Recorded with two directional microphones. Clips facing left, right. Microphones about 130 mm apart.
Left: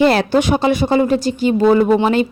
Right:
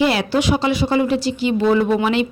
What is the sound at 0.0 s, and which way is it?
Speech, 50° left (ahead or behind).